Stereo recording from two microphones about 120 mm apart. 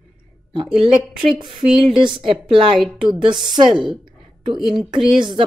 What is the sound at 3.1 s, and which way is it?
Speech, 40° right (ahead or behind).